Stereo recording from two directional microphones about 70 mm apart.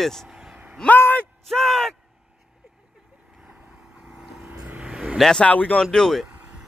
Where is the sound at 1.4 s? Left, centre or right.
Centre.